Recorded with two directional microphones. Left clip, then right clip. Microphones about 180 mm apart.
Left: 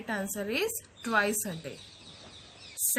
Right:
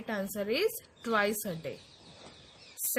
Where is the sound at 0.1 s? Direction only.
35° right (ahead or behind).